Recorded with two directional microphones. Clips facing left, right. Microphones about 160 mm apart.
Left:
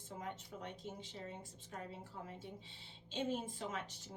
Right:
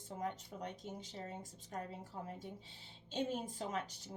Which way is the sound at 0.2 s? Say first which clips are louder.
Right 5 dB; 40° right (ahead or behind).